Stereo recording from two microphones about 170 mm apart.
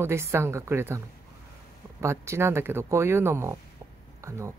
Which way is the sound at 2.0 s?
15° right (ahead or behind).